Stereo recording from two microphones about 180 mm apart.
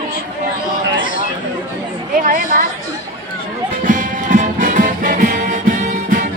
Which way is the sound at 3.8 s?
45° right (ahead or behind).